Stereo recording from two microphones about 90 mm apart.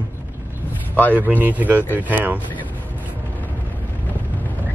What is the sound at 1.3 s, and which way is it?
Speech, 20° right (ahead or behind).